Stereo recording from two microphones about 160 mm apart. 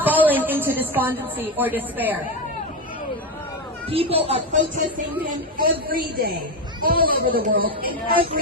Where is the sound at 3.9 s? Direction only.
35° right (ahead or behind).